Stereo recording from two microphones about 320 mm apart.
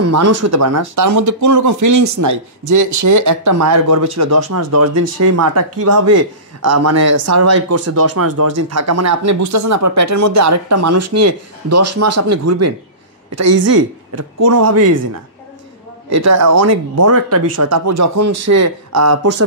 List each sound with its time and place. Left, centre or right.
0.0 s speech: right
16.1 s speech: right